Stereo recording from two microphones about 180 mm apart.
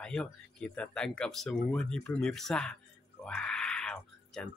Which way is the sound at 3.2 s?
5° left (ahead or behind).